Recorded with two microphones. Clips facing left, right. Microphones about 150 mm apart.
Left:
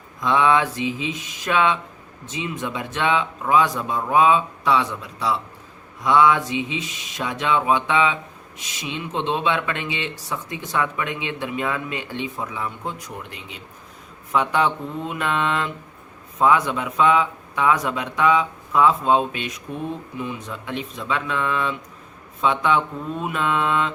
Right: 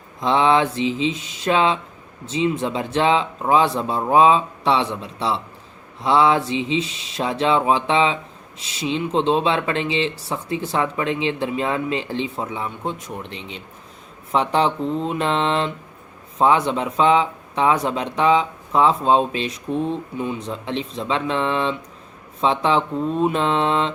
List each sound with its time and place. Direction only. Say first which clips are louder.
0.2 s speech: right 2 dB; 25° right (ahead or behind)